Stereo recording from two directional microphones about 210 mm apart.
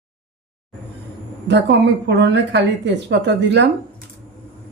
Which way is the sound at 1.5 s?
55° right (ahead or behind).